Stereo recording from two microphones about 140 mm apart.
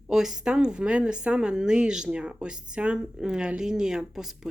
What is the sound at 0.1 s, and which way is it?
Speech, 5° right (ahead or behind).